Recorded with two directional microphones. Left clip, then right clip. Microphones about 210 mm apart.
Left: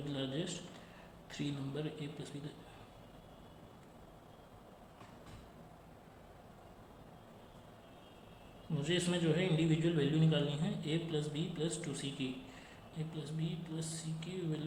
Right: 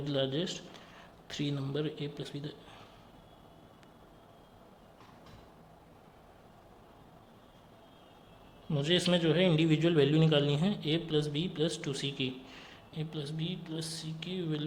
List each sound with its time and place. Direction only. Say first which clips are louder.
0.0 s speech: right 8 dB; 40° right (ahead or behind)
8.7 s a man's voice: right 7 dB; 40° right (ahead or behind)